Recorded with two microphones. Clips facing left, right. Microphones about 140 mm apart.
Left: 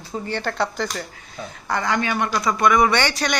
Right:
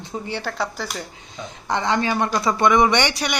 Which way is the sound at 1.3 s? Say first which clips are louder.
Right 1 dB; 20° right (ahead or behind).